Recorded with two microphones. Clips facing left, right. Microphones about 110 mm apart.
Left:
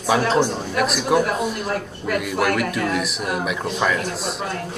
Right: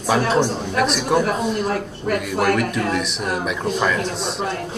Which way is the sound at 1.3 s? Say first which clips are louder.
Right 2 dB; 45° right (ahead or behind).